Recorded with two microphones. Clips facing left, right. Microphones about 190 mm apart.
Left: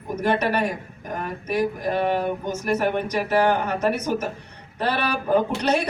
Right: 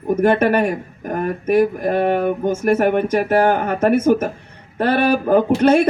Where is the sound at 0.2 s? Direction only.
50° right (ahead or behind).